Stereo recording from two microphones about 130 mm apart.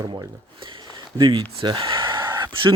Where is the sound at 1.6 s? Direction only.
40° right (ahead or behind).